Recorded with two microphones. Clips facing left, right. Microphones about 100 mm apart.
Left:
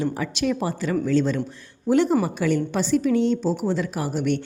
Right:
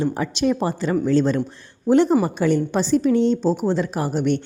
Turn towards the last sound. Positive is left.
turn(degrees=-30)  # may be behind; listen again after turning